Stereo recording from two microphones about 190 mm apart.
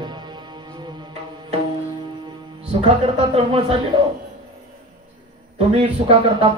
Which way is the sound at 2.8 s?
30° right (ahead or behind).